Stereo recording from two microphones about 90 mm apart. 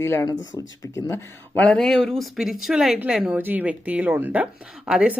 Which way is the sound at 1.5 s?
15° left (ahead or behind).